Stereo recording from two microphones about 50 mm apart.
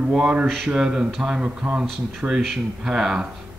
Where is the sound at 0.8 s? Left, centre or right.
Centre.